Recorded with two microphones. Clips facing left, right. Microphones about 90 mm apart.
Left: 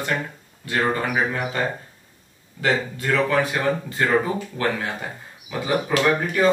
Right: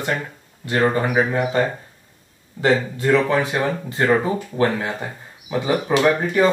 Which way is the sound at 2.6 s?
25° right (ahead or behind).